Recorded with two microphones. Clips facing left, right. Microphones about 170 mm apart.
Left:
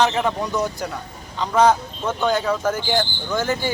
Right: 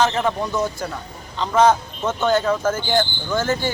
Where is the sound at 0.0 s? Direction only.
10° left (ahead or behind).